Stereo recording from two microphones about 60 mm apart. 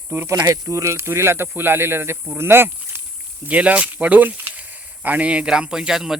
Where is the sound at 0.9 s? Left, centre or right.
Right.